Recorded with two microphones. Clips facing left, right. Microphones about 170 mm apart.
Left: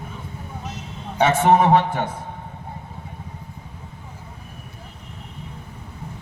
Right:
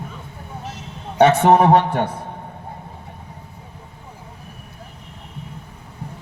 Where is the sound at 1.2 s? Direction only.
65° right (ahead or behind).